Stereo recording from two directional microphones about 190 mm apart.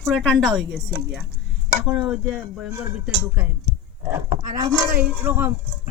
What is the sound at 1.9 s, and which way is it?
Speech, centre (ahead or behind).